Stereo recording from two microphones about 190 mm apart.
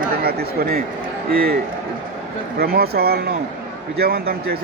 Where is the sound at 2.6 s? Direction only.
55° right (ahead or behind).